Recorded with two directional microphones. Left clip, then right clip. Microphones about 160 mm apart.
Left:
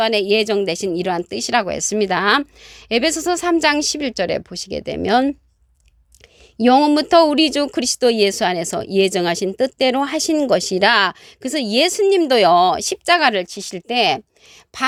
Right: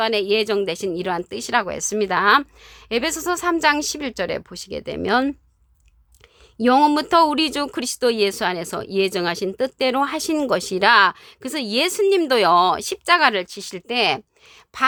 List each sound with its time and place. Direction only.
0.0 s a woman's voice: 25° left (ahead or behind)
6.6 s a woman's voice: 20° left (ahead or behind)